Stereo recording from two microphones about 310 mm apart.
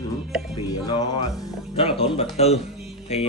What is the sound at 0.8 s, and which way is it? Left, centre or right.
Speech, centre.